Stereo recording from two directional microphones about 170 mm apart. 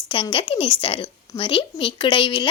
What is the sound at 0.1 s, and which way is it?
A woman's voice, 30° left (ahead or behind).